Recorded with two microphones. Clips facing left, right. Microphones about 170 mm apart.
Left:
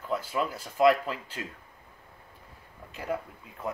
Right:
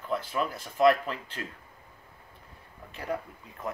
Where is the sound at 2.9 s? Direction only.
5° left (ahead or behind).